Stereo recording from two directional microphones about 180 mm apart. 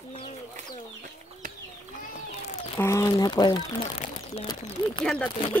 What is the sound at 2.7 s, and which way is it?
Speech, 15° left (ahead or behind).